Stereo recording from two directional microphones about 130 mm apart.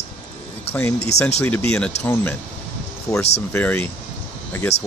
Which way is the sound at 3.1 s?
25° left (ahead or behind).